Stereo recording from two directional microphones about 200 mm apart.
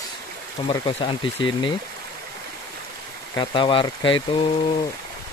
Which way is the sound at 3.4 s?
25° left (ahead or behind).